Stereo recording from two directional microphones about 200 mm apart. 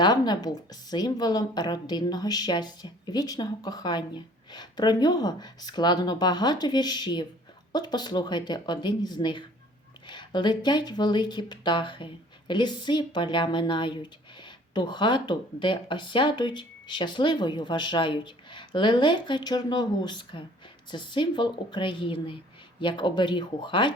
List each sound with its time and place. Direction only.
0.0 s a woman's voice: 20° left (ahead or behind)